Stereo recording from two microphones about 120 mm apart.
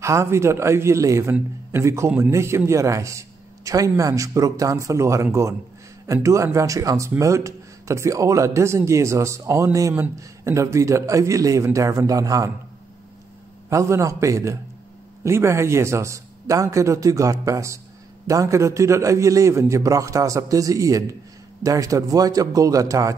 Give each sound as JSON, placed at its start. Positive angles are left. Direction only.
{"t": 0.0, "sound": "a man's voice", "side_deg": -25}
{"t": 13.7, "sound": "a man's voice", "side_deg": -25}